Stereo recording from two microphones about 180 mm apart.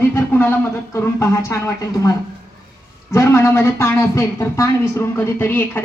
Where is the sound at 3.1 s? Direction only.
15° left (ahead or behind).